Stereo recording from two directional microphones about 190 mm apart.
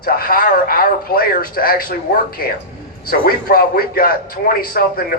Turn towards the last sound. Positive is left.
turn(degrees=50)  # may be behind; listen again after turning